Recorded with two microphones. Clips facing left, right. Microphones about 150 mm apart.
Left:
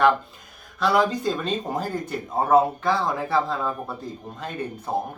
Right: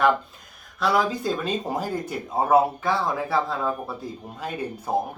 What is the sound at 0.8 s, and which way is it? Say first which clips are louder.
Speech: left 2 dB; centre (ahead or behind).